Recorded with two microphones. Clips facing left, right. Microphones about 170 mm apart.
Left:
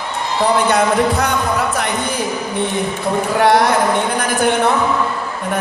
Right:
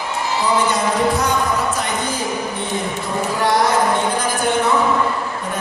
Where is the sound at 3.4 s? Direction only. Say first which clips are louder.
Left 5 dB; 65° left (ahead or behind).